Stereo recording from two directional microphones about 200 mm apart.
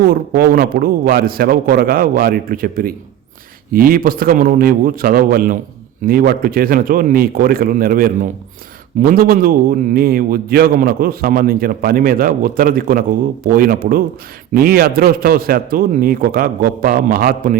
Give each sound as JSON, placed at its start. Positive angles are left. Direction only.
{"t": 0.1, "sound": "a man's voice", "side_deg": -45}